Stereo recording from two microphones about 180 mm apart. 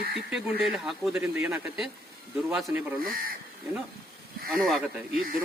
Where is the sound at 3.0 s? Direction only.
55° right (ahead or behind).